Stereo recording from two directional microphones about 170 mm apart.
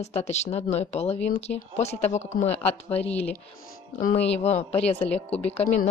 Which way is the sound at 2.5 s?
10° left (ahead or behind).